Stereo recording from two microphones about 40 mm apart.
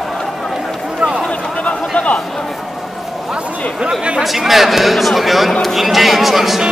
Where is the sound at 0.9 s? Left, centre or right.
Right.